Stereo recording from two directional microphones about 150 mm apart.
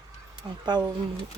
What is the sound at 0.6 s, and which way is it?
Speech, 30° right (ahead or behind).